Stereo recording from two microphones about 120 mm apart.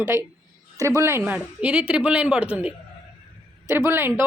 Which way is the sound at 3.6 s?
20° right (ahead or behind).